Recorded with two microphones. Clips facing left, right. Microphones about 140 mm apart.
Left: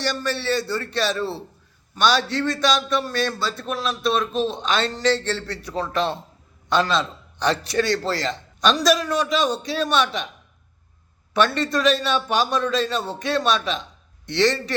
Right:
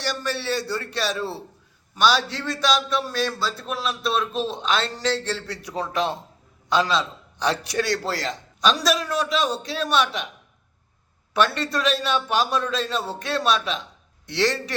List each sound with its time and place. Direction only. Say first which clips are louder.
0.0 s a man's voice: left 2 dB; 10° right (ahead or behind)
11.3 s a man's voice: left 2 dB; 5° right (ahead or behind)